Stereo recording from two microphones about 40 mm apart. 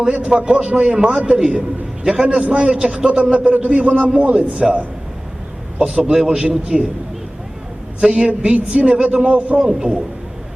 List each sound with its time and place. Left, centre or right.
0.0 s a man's voice: right
5.8 s a man's voice: right
8.1 s a man's voice: right